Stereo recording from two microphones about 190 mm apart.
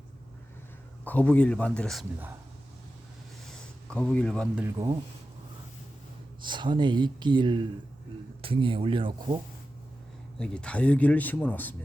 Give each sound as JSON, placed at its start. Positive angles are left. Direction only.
{"t": 1.0, "sound": "speech", "side_deg": 10}
{"t": 3.4, "sound": "a sound", "side_deg": 5}
{"t": 4.5, "sound": "speech", "side_deg": -10}
{"t": 6.4, "sound": "speech", "side_deg": -25}
{"t": 10.3, "sound": "speech", "side_deg": 5}